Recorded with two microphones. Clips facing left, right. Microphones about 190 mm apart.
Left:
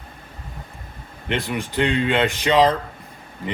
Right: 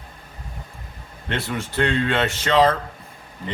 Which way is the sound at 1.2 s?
15° left (ahead or behind).